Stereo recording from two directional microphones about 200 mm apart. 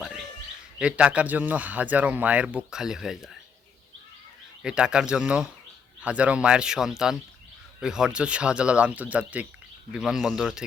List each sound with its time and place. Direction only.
0.8 s speech: 5° right (ahead or behind)
4.6 s speech: 5° right (ahead or behind)